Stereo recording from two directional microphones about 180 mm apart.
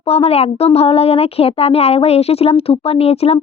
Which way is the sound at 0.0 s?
35° left (ahead or behind).